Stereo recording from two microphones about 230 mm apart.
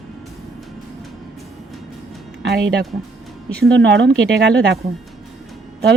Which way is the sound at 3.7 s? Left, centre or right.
Right.